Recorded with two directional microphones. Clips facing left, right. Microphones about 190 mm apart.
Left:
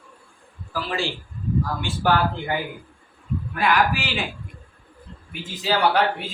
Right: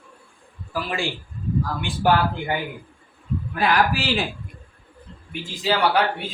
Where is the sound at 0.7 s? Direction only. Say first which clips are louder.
Even; 15° right (ahead or behind).